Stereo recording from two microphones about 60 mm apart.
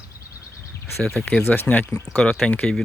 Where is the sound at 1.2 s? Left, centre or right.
Centre.